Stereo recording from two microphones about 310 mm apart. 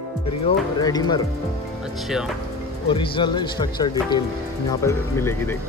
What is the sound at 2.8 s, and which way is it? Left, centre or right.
Speech, centre.